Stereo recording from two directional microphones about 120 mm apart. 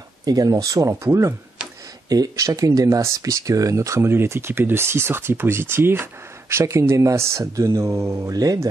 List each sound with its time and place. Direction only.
0.2 s speech: 30° right (ahead or behind)